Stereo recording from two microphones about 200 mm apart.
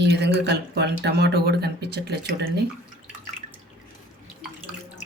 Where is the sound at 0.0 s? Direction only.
60° right (ahead or behind).